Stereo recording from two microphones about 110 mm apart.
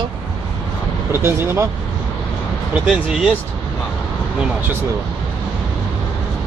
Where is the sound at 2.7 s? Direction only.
10° right (ahead or behind).